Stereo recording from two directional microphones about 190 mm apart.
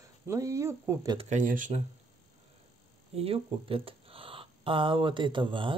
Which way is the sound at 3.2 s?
30° right (ahead or behind).